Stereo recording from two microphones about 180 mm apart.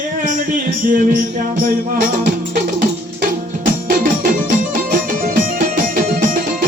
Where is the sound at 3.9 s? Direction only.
50° right (ahead or behind).